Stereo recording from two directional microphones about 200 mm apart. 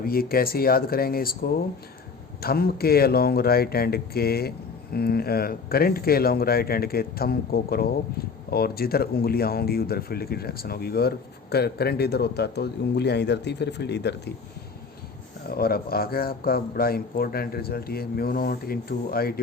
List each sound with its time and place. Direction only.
0.0 s speech: 50° left (ahead or behind)
15.4 s speech: 50° left (ahead or behind)